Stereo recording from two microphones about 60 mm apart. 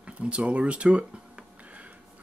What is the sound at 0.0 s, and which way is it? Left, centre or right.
Speech, centre.